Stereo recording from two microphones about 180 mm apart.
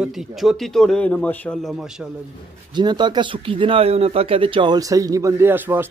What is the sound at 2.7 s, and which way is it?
Speech, 25° right (ahead or behind).